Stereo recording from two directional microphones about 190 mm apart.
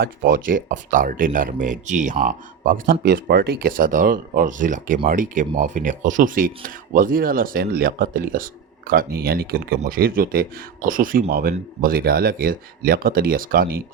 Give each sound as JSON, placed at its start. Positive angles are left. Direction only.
{"t": 0.0, "sound": "speech", "side_deg": -45}